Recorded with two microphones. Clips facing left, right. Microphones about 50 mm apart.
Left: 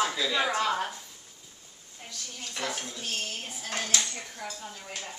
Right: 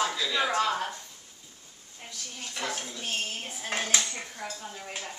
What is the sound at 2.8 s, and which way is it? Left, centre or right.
Speech, centre.